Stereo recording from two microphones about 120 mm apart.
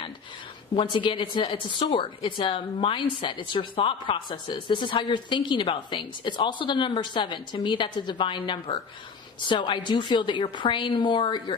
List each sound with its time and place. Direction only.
0.7 s a woman's voice: 45° left (ahead or behind)